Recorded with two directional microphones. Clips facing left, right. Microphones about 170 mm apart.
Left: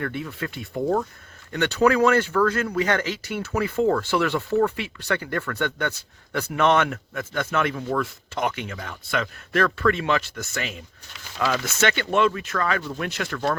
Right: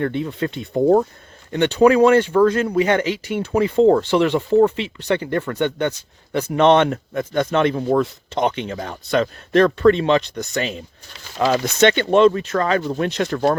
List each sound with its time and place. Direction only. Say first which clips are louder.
0.0 s speech: right 7 dB; 25° right (ahead or behind)
1.5 s speech: right 6 dB; 20° right (ahead or behind)
3.5 s speech: right 8 dB; 25° right (ahead or behind)